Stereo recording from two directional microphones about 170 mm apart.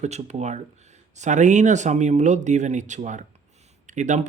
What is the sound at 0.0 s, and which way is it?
Speech, 40° right (ahead or behind).